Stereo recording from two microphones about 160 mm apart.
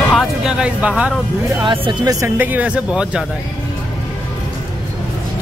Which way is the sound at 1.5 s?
25° right (ahead or behind).